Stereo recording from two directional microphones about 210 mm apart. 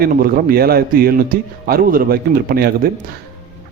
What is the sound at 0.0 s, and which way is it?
A man's voice, 45° right (ahead or behind).